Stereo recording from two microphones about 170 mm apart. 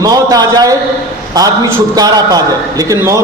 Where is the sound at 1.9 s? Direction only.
20° right (ahead or behind).